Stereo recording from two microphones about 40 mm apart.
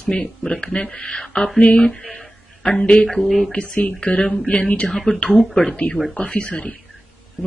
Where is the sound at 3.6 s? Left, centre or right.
Left.